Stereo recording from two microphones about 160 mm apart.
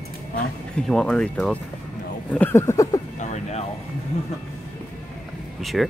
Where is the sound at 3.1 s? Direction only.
45° left (ahead or behind).